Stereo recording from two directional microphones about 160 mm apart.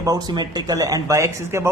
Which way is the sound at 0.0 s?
25° right (ahead or behind).